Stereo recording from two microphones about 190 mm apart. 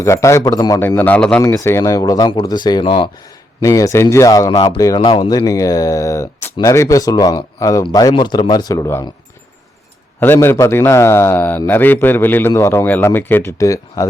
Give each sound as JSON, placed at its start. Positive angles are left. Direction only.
{"t": 0.0, "sound": "a man's voice", "side_deg": 15}
{"t": 10.2, "sound": "a man's voice", "side_deg": 10}